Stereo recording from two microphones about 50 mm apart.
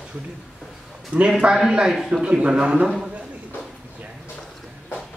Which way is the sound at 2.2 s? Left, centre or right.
Right.